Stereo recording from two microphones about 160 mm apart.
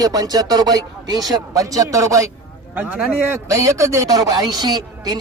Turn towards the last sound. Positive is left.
turn(degrees=-25)  # may be behind; listen again after turning